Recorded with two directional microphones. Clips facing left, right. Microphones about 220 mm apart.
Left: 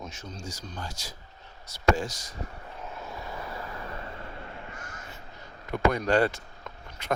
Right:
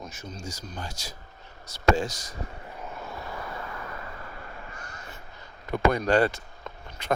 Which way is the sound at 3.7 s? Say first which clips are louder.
Even; 30° left (ahead or behind).